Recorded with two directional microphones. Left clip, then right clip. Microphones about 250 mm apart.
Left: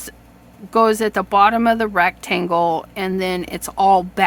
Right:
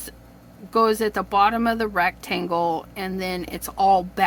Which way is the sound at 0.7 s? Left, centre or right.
Centre.